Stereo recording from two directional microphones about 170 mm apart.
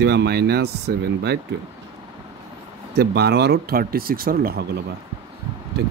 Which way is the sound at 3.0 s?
70° right (ahead or behind).